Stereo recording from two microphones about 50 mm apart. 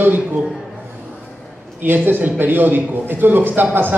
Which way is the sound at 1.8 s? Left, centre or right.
Right.